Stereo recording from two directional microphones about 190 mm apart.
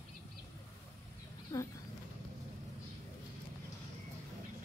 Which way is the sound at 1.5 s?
20° left (ahead or behind).